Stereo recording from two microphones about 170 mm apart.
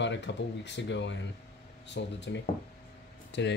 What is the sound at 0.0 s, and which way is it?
Speech, 90° left.